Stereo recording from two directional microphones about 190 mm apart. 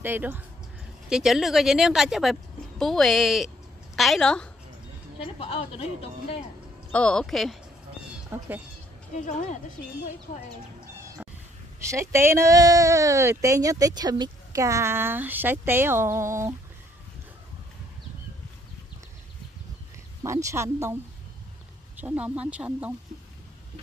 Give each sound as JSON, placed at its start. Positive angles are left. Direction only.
{"t": 0.0, "sound": "a woman's voice", "side_deg": -10}
{"t": 5.2, "sound": "a woman's voice", "side_deg": 30}
{"t": 6.9, "sound": "speech", "side_deg": 5}
{"t": 8.3, "sound": "speech", "side_deg": -10}
{"t": 9.2, "sound": "a woman's voice", "side_deg": 40}
{"t": 11.2, "sound": "cat", "side_deg": -5}
{"t": 11.9, "sound": "speech", "side_deg": -15}
{"t": 20.2, "sound": "speech", "side_deg": -15}
{"t": 22.0, "sound": "speech", "side_deg": -10}